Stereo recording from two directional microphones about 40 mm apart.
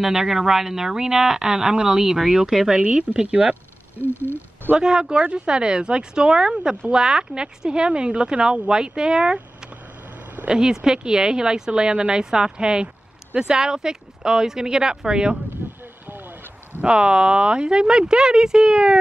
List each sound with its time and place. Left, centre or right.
0.0 s speech: centre
2.8 s speech: right
4.0 s speech: left
4.7 s speech: centre
10.5 s speech: centre
12.8 s a sound: right
13.5 s speech: centre
16.8 s speech: right